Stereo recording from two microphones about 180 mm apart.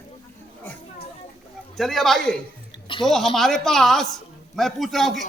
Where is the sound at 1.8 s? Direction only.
Centre (ahead or behind).